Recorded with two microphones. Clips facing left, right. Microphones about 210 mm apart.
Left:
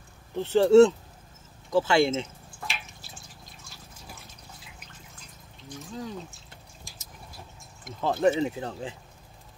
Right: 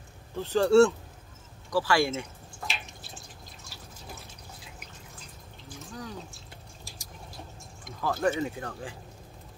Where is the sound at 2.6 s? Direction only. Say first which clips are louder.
Even; centre (ahead or behind).